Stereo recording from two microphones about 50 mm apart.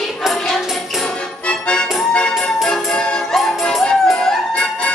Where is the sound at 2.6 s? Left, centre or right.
Centre.